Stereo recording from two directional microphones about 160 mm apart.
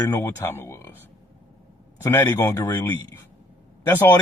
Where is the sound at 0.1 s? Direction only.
15° left (ahead or behind).